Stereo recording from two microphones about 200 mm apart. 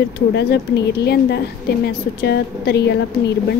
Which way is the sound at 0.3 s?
60° left (ahead or behind).